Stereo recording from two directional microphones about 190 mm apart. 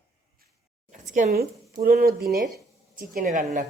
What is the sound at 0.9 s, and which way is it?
Speech, 40° right (ahead or behind).